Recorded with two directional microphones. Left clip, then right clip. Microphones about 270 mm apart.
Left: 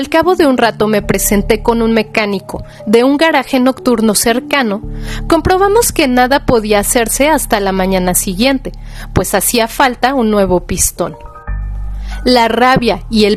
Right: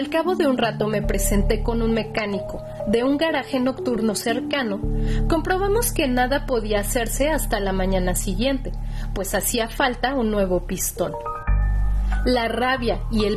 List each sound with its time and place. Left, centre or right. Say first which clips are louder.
0.0 s speech: left 11 dB; left
12.2 s speech: left 12 dB; left